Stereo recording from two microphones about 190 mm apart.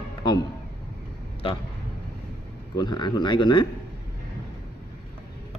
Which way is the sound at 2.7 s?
20° left (ahead or behind).